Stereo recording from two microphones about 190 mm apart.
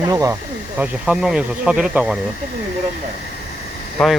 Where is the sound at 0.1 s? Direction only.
20° right (ahead or behind).